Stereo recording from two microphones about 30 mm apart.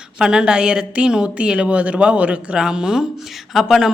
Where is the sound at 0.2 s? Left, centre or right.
Right.